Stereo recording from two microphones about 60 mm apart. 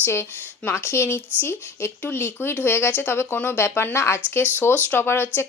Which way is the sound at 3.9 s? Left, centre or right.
Left.